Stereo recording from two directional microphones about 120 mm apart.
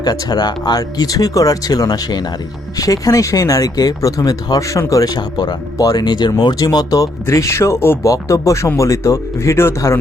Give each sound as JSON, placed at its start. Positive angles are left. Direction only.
{"t": 0.0, "sound": "speech", "side_deg": 35}